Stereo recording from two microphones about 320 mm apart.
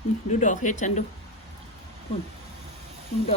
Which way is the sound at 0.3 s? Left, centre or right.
Left.